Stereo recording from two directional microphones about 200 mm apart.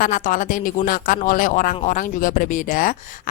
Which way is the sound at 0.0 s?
40° left (ahead or behind).